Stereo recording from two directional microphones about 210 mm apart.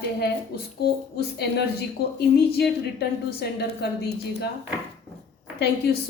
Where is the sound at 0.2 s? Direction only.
50° left (ahead or behind).